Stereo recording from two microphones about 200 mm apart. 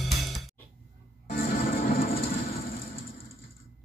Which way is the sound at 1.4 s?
45° left (ahead or behind).